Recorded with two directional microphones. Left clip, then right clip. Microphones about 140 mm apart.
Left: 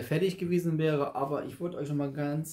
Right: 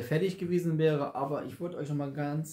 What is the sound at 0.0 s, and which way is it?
Speech, 15° left (ahead or behind).